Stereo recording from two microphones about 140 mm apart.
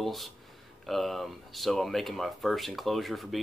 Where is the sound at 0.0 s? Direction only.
Centre (ahead or behind).